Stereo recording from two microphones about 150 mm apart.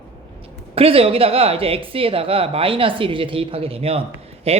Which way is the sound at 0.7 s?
40° right (ahead or behind).